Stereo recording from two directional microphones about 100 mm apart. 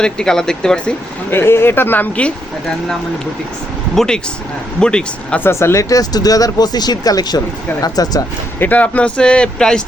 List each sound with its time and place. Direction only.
0.0 s speech: 5° left (ahead or behind)
1.3 s speech: 25° left (ahead or behind)
3.9 s speech: 5° left (ahead or behind)
5.4 s speech: 25° left (ahead or behind)
8.5 s speech: 15° left (ahead or behind)